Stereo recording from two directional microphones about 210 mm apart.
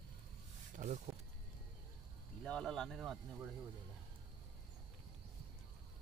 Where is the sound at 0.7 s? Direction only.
35° right (ahead or behind).